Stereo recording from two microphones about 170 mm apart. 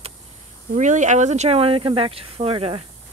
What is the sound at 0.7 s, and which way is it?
Speech, 45° right (ahead or behind).